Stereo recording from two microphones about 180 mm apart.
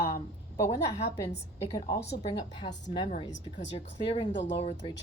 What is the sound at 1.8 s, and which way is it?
Speech, 55° left (ahead or behind).